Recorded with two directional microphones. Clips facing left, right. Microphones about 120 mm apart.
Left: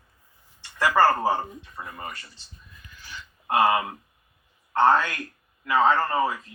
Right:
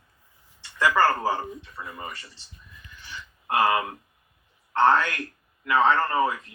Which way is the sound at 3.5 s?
25° left (ahead or behind).